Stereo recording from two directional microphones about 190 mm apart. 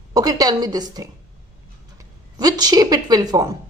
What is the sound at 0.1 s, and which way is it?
Speech, 20° right (ahead or behind).